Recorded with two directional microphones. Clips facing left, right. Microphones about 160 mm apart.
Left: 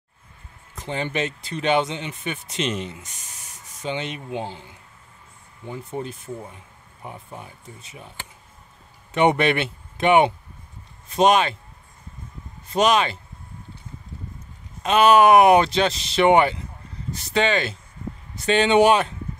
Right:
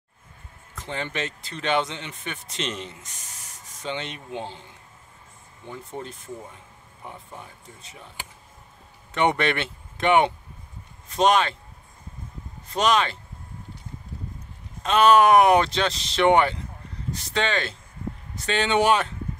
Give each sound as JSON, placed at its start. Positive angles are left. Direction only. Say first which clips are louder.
{"t": 0.7, "sound": "speech", "louder": "left 4 dB", "side_deg": 15}
{"t": 5.7, "sound": "speech", "louder": "left 5 dB", "side_deg": 10}
{"t": 9.1, "sound": "speech", "louder": "left 4 dB", "side_deg": 15}
{"t": 12.7, "sound": "speech", "louder": "left 3 dB", "side_deg": 10}
{"t": 14.8, "sound": "speech", "louder": "left 2 dB", "side_deg": 10}